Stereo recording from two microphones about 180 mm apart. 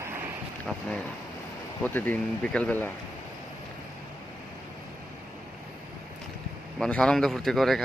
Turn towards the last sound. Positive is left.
turn(degrees=0)  # may be behind; listen again after turning